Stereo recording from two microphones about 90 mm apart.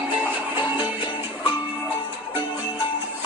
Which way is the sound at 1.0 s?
60° left (ahead or behind).